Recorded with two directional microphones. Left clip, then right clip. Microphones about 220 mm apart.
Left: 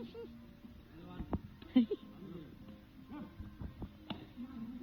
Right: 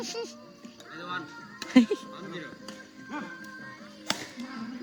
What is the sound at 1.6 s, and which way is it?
Music, 45° right (ahead or behind).